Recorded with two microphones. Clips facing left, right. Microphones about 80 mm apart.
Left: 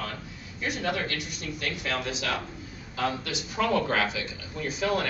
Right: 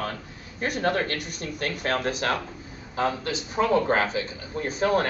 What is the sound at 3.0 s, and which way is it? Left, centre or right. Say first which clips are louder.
Speech: right 4 dB; right.